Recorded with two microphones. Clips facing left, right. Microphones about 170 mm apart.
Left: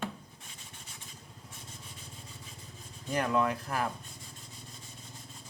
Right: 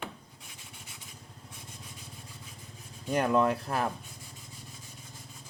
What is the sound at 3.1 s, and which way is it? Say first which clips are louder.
Speech: right 3 dB; 25° right (ahead or behind).